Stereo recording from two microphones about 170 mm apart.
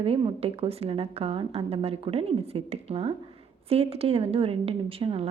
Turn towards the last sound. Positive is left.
turn(degrees=-35)  # may be behind; listen again after turning